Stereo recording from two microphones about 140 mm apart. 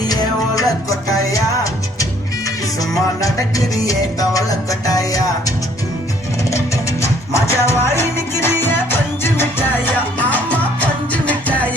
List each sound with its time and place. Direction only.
0.1 s music: 25° left (ahead or behind)
7.0 s music: 20° left (ahead or behind)